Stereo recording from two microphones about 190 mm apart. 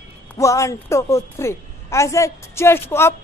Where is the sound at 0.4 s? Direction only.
15° left (ahead or behind).